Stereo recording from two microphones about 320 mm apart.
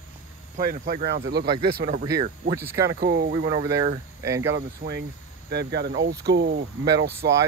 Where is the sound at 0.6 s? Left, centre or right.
Right.